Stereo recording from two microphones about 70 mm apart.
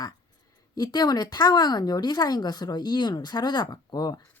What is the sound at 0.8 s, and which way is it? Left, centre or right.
A woman's voice, left.